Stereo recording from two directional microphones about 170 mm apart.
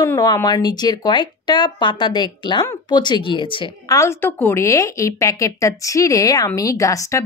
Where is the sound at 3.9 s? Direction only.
15° left (ahead or behind).